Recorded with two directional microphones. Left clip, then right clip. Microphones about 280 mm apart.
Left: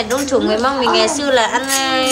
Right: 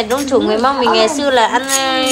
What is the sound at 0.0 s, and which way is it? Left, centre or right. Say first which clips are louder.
A woman's voice: right 2 dB; centre.